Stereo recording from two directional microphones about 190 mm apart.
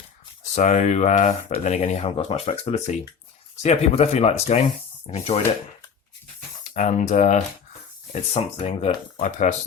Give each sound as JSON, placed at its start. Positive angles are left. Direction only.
{"t": 0.5, "sound": "speech", "side_deg": 40}
{"t": 6.7, "sound": "speech", "side_deg": 40}